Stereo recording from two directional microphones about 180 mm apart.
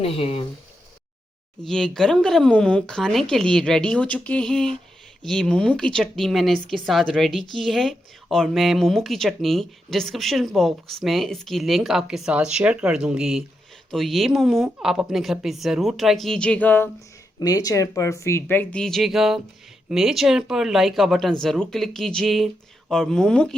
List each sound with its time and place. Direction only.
0.0 s speech: 30° left (ahead or behind)
1.6 s speech: 5° left (ahead or behind)